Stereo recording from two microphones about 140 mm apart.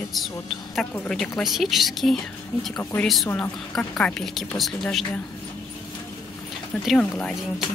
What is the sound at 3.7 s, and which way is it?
Speech, 5° left (ahead or behind).